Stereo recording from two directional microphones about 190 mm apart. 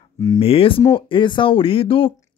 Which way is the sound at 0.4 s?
30° left (ahead or behind).